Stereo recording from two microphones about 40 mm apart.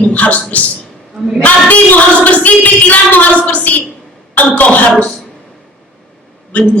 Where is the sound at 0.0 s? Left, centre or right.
Left.